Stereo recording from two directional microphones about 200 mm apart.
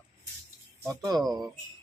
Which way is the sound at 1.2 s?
Centre (ahead or behind).